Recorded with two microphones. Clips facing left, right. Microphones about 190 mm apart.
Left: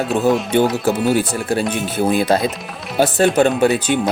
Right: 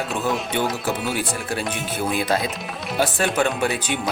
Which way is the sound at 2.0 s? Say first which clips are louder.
Left 7 dB; 35° left (ahead or behind).